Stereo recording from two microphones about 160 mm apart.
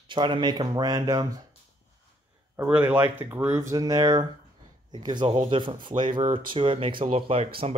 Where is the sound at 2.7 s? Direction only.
10° right (ahead or behind).